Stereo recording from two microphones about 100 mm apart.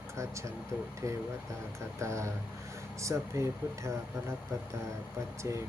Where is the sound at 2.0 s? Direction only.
30° right (ahead or behind).